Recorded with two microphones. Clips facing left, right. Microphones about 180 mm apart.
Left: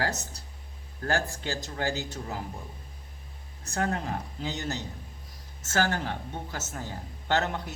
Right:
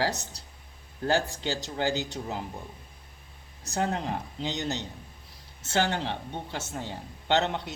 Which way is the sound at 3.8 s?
30° right (ahead or behind).